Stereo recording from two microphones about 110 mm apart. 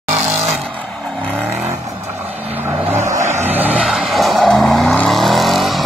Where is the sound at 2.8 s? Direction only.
20° right (ahead or behind).